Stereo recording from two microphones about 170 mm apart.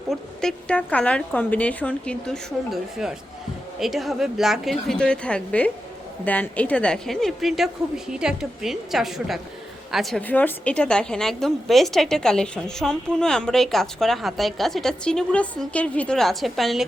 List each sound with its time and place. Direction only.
0.1 s a woman's voice: 5° left (ahead or behind)